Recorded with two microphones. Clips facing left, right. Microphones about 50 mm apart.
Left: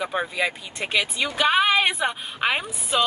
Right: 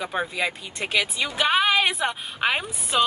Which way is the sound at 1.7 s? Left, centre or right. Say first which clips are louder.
Left 1 dB; left.